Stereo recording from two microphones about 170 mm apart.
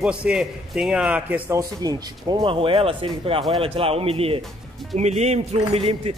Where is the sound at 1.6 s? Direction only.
20° right (ahead or behind).